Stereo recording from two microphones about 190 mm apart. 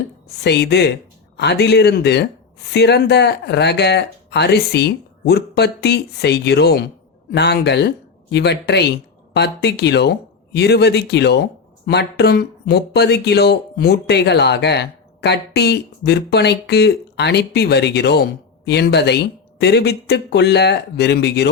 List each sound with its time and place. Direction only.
0.4 s speech: 65° left (ahead or behind)